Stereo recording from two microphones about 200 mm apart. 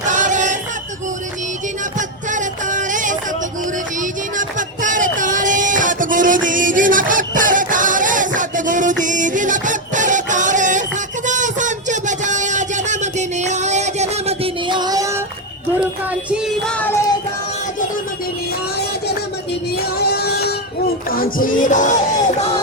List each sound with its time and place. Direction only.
0.0 s choir: 40° right (ahead or behind)
2.0 s music: 40° right (ahead or behind)
4.0 s a sound: 40° right (ahead or behind); by 15.1 s 20° right (ahead or behind)
16.3 s music: 5° left (ahead or behind)
19.8 s music: 50° left (ahead or behind)